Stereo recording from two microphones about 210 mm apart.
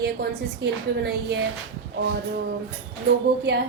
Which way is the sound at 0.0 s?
55° right (ahead or behind).